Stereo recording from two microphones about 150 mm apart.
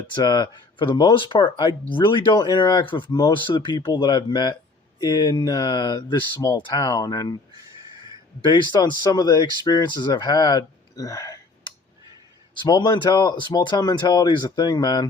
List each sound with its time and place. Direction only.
0.1 s speech: 30° left (ahead or behind)